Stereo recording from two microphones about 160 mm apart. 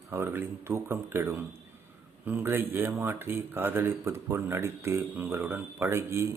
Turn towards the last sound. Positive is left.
turn(degrees=-15)  # may be behind; listen again after turning